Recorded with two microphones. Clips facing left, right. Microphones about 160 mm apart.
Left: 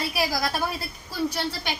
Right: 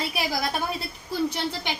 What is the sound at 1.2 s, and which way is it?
Speech, 20° right (ahead or behind).